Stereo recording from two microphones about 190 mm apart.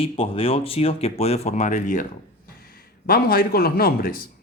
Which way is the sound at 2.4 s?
50° left (ahead or behind).